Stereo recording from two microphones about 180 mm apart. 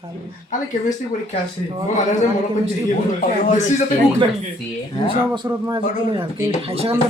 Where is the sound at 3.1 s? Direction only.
45° left (ahead or behind).